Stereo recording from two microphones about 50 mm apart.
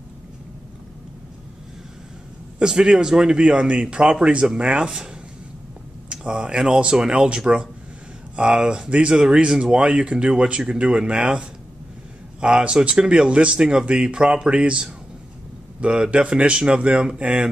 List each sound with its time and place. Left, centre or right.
2.6 s speech: centre